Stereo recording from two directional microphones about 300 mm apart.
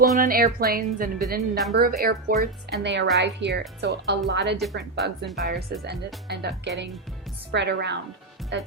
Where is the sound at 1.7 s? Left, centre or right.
Right.